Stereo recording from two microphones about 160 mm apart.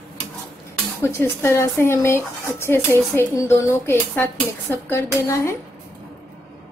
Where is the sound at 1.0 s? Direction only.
15° left (ahead or behind).